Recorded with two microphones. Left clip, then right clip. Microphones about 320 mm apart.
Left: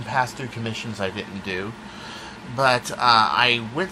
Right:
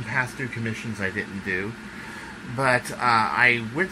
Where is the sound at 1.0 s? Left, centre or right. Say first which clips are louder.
Right 3 dB; left.